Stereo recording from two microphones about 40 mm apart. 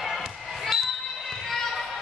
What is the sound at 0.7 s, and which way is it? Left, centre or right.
Basketball bounce, centre.